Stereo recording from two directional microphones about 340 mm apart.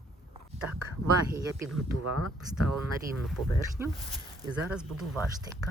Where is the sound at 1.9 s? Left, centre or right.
Right.